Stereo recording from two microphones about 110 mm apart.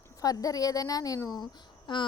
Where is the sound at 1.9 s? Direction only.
45° left (ahead or behind).